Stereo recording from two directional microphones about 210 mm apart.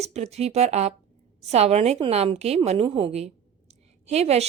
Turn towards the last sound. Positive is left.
turn(degrees=-30)  # may be behind; listen again after turning